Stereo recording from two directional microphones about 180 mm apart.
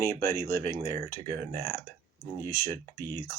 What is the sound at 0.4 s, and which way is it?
Speech, 15° left (ahead or behind).